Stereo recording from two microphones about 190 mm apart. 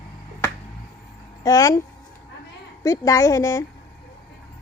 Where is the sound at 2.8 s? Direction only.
15° left (ahead or behind).